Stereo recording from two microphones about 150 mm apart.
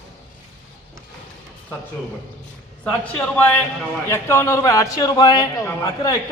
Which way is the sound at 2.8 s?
10° left (ahead or behind).